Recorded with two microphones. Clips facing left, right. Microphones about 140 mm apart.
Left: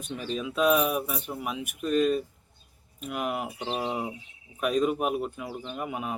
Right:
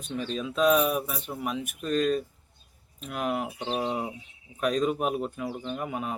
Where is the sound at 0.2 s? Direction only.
5° left (ahead or behind).